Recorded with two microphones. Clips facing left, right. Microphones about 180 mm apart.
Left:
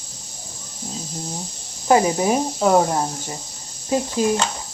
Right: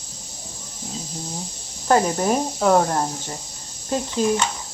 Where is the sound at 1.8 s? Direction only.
5° left (ahead or behind).